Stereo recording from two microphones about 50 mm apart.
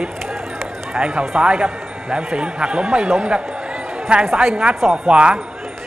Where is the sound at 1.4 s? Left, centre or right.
Centre.